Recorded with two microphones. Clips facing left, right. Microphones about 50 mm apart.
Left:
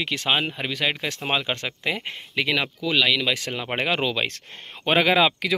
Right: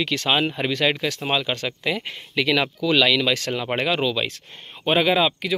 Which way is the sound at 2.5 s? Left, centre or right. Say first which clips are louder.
Right 5 dB; centre.